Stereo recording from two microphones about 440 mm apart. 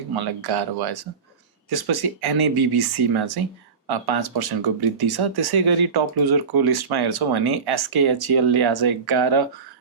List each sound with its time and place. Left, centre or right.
0.2 s speech: right